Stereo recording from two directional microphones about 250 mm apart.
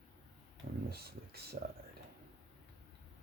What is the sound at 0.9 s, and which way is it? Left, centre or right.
Speech, right.